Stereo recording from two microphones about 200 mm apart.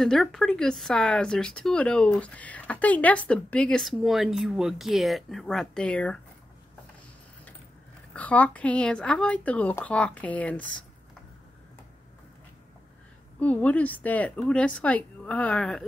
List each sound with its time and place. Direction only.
0.0 s speech: centre (ahead or behind)
8.1 s speech: 5° left (ahead or behind)
13.4 s speech: 5° left (ahead or behind)